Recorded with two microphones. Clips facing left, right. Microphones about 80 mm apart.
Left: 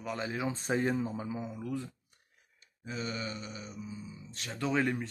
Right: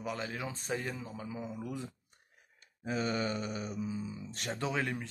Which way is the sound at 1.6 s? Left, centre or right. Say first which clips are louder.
Left 3 dB; centre.